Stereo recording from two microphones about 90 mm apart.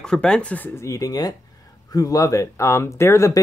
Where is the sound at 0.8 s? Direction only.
40° left (ahead or behind).